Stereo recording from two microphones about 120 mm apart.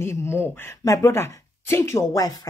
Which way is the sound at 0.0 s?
20° left (ahead or behind).